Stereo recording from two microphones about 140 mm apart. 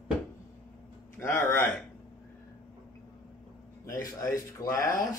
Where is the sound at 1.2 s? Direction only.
15° left (ahead or behind).